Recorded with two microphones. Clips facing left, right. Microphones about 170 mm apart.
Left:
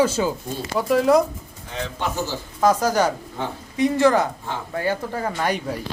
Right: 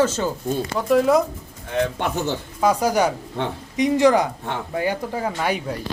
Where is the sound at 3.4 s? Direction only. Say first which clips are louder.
Right 4 dB; 65° right (ahead or behind).